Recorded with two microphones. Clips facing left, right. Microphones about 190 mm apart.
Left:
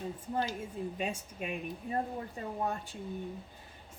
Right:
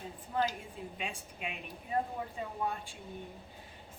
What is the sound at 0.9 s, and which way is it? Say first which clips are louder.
Speech: left 6 dB; 45° left (ahead or behind).